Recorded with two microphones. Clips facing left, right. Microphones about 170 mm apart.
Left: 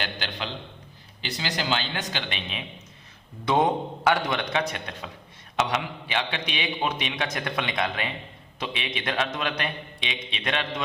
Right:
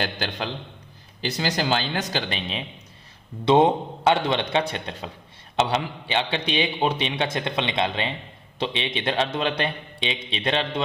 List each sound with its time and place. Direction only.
0.0 s a man's voice: 45° right (ahead or behind)